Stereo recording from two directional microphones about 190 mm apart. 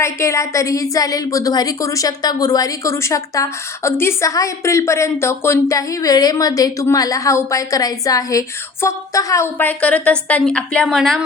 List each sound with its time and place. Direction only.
0.0 s a woman's voice: 15° left (ahead or behind); by 11.2 s centre (ahead or behind)